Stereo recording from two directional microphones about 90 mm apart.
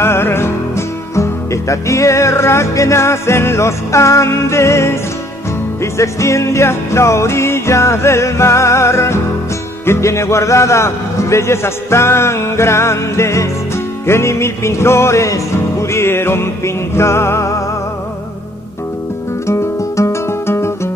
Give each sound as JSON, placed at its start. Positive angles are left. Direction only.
{"t": 0.0, "sound": "music", "side_deg": 25}
{"t": 5.8, "sound": "a man's voice", "side_deg": 35}
{"t": 14.0, "sound": "music", "side_deg": 30}
{"t": 19.4, "sound": "music", "side_deg": 35}